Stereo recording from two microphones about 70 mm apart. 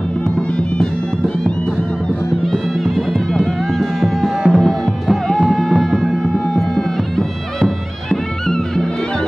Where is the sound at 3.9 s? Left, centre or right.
Centre.